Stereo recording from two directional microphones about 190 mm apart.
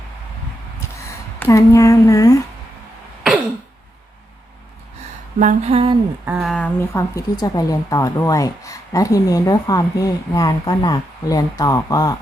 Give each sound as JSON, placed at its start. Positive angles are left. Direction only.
{"t": 1.4, "sound": "speech", "side_deg": 15}
{"t": 5.4, "sound": "mantra", "side_deg": -40}
{"t": 6.2, "sound": "speech", "side_deg": -10}
{"t": 6.5, "sound": "speech", "side_deg": 10}